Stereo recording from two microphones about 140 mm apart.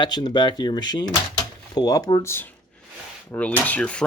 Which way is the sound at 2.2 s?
15° left (ahead or behind).